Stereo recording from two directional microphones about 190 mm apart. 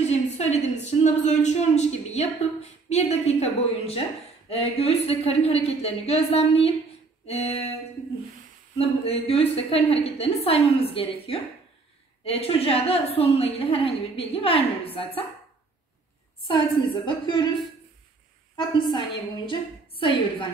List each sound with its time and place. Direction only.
0.1 s a sound: 35° left (ahead or behind)
0.8 s a woman's voice: 40° left (ahead or behind)
8.7 s a woman's voice: 30° left (ahead or behind)
16.4 s a woman's voice: 25° left (ahead or behind)
18.6 s a woman's voice: 25° left (ahead or behind)